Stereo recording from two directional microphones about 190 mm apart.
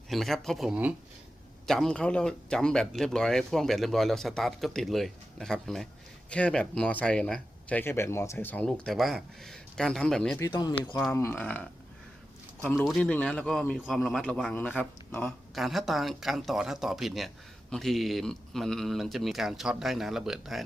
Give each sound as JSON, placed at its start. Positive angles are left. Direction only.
{"t": 0.1, "sound": "a man's voice", "side_deg": 0}
{"t": 10.4, "sound": "speech", "side_deg": 20}
{"t": 12.7, "sound": "a man's voice", "side_deg": 0}